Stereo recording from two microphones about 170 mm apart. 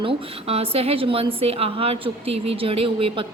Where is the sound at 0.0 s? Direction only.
35° right (ahead or behind).